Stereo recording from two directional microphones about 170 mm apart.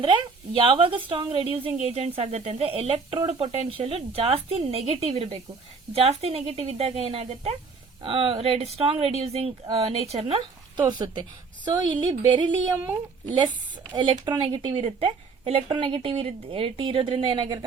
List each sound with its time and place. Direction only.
0.0 s a woman's voice: 30° right (ahead or behind)
12.7 s speech: 10° right (ahead or behind)
13.2 s a woman's voice: 30° right (ahead or behind)